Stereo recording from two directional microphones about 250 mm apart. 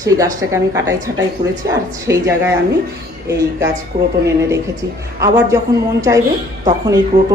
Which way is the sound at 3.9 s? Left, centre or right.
Right.